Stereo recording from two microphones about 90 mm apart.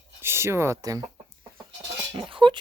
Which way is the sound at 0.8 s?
45° right (ahead or behind).